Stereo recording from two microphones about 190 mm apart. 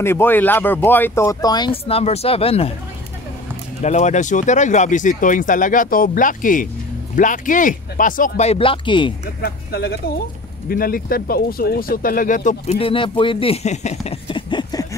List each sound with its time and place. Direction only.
0.0 s speech: 10° left (ahead or behind); by 2.7 s 30° left (ahead or behind)
3.8 s speech: 35° left (ahead or behind)
9.4 s speech: 55° left (ahead or behind); by 14.9 s 20° left (ahead or behind)